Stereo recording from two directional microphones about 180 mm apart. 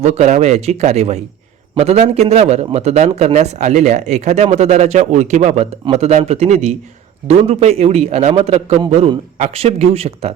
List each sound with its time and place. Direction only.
0.0 s speech: 40° right (ahead or behind)